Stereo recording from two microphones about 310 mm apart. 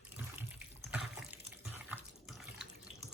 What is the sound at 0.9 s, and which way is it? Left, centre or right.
Water, centre.